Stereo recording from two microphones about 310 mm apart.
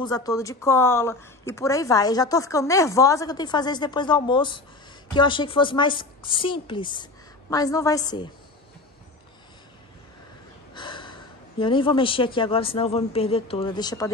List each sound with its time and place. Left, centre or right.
0.0 s a woman's voice: centre
10.7 s speech: centre